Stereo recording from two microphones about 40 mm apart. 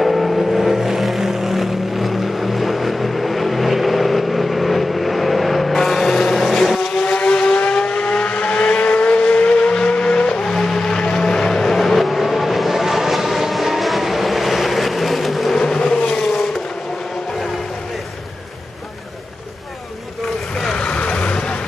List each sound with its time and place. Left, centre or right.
0.0 s vehicle: centre
7.1 s vehicle: left
10.4 s vehicle: centre
15.5 s vehicle: centre
15.8 s vehicle: left
20.6 s vehicle: centre
20.9 s vehicle: left